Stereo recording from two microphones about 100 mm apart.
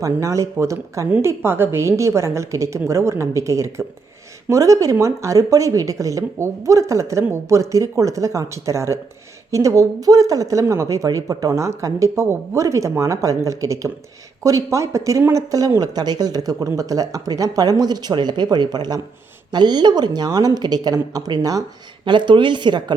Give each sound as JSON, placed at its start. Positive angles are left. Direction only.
{"t": 0.0, "sound": "a woman's voice", "side_deg": -30}
{"t": 22.0, "sound": "speech", "side_deg": -50}